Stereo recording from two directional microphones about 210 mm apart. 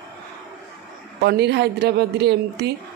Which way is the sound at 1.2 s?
50° right (ahead or behind).